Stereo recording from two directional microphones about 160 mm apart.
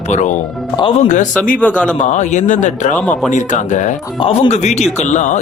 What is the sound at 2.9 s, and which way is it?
Speech, 10° left (ahead or behind).